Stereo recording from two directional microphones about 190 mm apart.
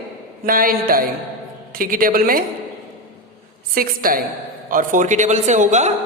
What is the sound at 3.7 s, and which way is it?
A woman's voice, 50° right (ahead or behind).